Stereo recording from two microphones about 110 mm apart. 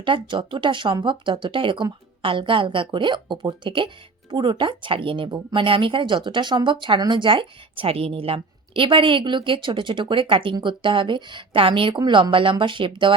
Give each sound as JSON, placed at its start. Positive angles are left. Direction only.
{"t": 0.0, "sound": "a woman's voice", "side_deg": -50}